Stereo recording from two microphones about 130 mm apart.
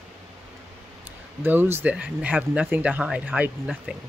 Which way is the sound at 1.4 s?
15° right (ahead or behind).